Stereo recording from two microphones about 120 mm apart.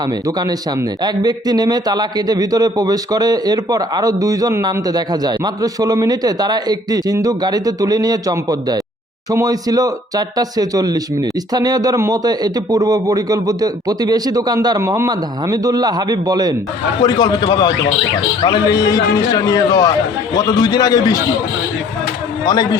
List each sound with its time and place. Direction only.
0.3 s a man's voice: 30° right (ahead or behind)
17.0 s a man's voice: 40° left (ahead or behind)
22.4 s a man's voice: 35° left (ahead or behind)